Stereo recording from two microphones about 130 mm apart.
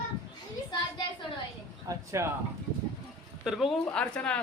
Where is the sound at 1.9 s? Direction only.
30° right (ahead or behind).